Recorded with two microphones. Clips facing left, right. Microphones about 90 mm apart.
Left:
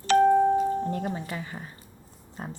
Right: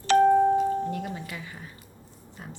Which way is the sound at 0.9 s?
35° left (ahead or behind).